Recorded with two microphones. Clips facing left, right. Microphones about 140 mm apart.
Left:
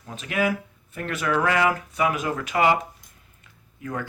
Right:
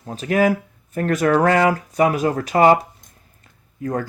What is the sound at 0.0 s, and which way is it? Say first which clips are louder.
Speech: right 7 dB; 40° right (ahead or behind).